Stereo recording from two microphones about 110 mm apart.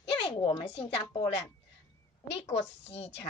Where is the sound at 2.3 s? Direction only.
70° left (ahead or behind).